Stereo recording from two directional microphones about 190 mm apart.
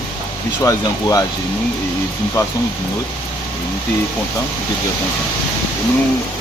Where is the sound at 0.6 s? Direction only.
20° left (ahead or behind).